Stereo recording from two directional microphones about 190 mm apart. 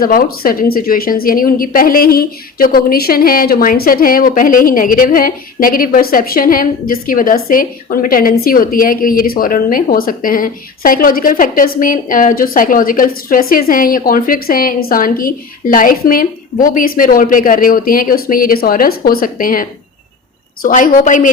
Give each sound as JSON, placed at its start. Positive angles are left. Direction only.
{"t": 0.0, "sound": "a woman's voice", "side_deg": 50}